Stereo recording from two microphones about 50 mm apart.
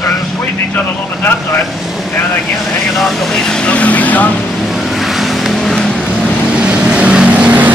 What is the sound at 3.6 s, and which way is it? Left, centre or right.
Speech, left.